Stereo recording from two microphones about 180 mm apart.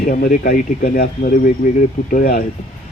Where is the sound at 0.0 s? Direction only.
50° left (ahead or behind).